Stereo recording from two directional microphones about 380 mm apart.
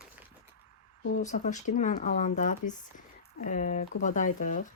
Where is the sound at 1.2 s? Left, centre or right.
Centre.